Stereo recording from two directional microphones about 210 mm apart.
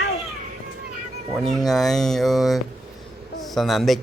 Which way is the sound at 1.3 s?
Centre (ahead or behind).